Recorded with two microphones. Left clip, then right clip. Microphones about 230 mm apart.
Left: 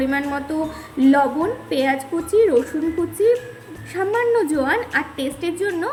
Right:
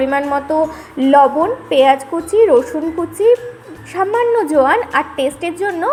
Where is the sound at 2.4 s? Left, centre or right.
Centre.